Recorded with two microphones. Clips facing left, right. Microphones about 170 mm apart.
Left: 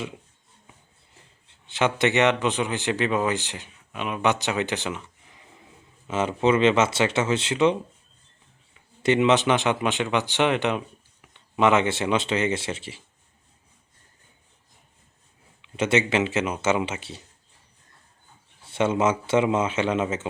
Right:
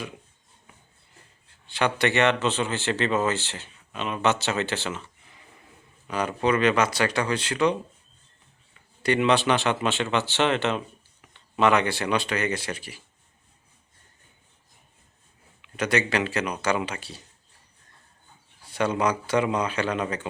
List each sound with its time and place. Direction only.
1.6 s speech: 20° left (ahead or behind)
9.0 s speech: 20° left (ahead or behind)
15.6 s speech: 25° left (ahead or behind)
18.6 s speech: 25° left (ahead or behind)